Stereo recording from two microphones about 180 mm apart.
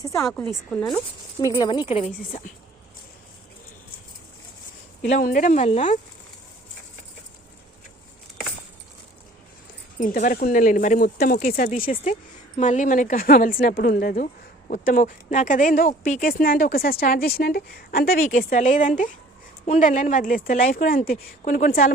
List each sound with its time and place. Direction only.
0.0 s a woman's voice: 15° left (ahead or behind)
0.7 s speech: 5° left (ahead or behind)
1.4 s a woman's voice: 20° left (ahead or behind); by 2.4 s 35° left (ahead or behind)
5.2 s speech: 45° left (ahead or behind)
10.0 s speech: 50° left (ahead or behind)